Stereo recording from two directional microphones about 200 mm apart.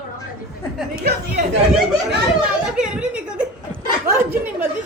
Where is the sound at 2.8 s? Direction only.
5° right (ahead or behind).